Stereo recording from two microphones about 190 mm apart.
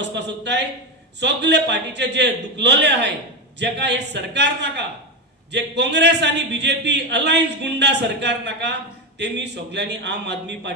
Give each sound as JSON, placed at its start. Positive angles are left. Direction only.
{"t": 0.0, "sound": "a man's voice", "side_deg": -65}